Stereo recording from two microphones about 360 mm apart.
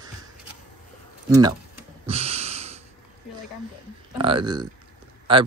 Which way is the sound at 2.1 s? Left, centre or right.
Centre.